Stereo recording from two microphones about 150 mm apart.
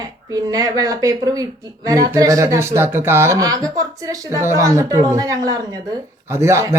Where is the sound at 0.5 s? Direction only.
25° right (ahead or behind).